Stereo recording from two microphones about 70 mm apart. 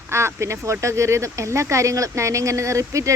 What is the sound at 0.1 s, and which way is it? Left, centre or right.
Speech, right.